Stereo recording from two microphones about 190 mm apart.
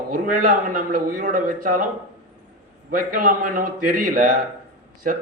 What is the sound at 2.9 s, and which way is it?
A man's voice, 50° right (ahead or behind).